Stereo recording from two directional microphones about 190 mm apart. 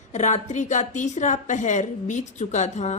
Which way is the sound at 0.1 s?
40° left (ahead or behind).